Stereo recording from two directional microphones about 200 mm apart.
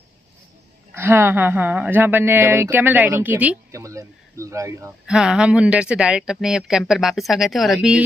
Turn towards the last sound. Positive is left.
turn(degrees=0)  # may be behind; listen again after turning